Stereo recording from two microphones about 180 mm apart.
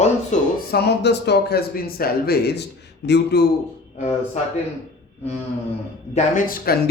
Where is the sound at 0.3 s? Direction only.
40° left (ahead or behind).